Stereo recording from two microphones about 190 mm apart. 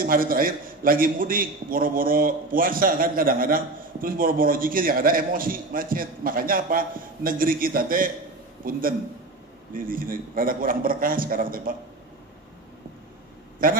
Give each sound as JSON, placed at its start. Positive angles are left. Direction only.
{"t": 0.0, "sound": "a man's voice", "side_deg": -50}